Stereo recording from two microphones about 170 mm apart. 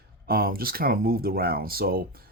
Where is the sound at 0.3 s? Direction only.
60° right (ahead or behind).